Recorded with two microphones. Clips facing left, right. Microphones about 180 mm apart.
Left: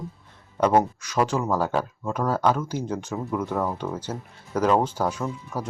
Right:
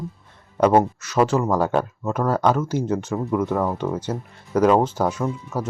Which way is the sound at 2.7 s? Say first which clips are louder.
Right 6 dB; 10° left (ahead or behind).